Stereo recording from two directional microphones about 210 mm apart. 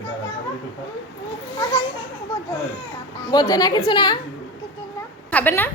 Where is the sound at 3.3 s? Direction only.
15° left (ahead or behind).